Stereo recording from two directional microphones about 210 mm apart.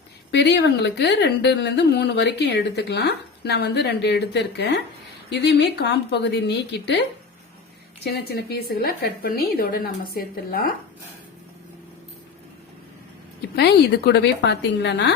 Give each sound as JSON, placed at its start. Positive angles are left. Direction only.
{"t": 0.3, "sound": "a woman's voice", "side_deg": 55}
{"t": 8.0, "sound": "a woman's voice", "side_deg": 50}
{"t": 13.6, "sound": "a woman's voice", "side_deg": 50}